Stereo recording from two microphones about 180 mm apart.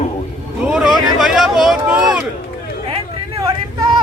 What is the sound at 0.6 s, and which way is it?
Speech, 5° right (ahead or behind).